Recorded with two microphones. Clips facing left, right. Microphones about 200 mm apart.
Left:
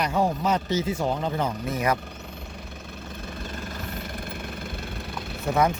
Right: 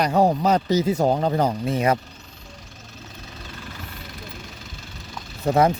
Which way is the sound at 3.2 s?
50° left (ahead or behind).